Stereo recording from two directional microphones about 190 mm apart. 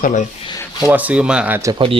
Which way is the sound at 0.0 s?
40° left (ahead or behind).